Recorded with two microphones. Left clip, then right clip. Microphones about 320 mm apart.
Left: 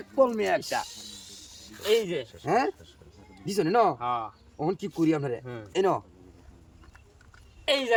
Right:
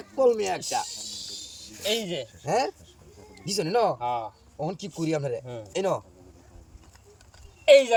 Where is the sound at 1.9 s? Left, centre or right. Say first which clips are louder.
Left 3 dB; centre.